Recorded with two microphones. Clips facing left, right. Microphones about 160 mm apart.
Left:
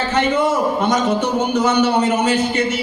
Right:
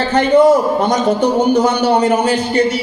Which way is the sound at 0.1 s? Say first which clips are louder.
Right 9 dB; 35° right (ahead or behind).